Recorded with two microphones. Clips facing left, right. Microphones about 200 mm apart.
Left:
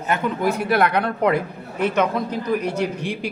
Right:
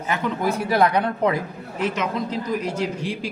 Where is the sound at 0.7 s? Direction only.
60° left (ahead or behind).